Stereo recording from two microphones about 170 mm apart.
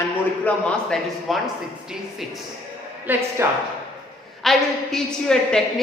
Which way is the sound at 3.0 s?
10° right (ahead or behind).